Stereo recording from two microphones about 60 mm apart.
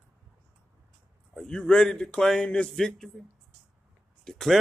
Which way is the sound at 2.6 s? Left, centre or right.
Centre.